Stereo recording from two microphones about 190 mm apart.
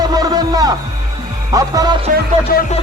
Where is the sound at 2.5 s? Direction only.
55° left (ahead or behind).